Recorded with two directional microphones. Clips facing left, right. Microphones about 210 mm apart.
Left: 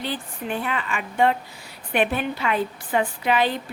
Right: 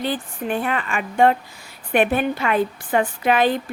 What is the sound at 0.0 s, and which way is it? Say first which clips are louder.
A woman's voice: right 5 dB; 50° right (ahead or behind).